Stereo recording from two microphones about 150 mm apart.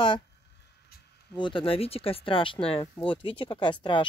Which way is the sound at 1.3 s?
35° left (ahead or behind).